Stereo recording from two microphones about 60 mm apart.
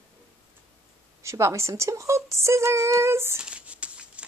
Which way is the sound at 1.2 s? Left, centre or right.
Right.